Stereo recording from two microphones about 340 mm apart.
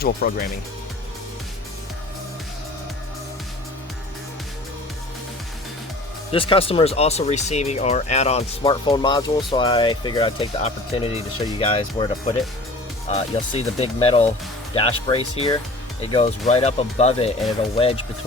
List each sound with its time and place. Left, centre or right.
0.0 s speech: left
6.3 s speech: centre